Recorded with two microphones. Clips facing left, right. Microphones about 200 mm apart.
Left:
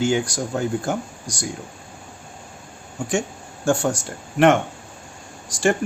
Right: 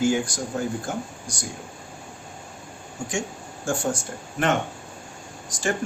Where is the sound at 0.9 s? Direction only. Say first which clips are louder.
Left 5 dB; 75° left (ahead or behind).